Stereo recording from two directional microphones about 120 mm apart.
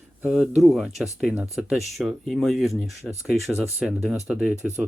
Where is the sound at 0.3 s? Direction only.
5° right (ahead or behind).